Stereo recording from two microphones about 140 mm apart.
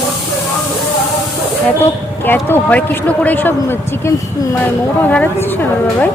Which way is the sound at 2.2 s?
15° left (ahead or behind).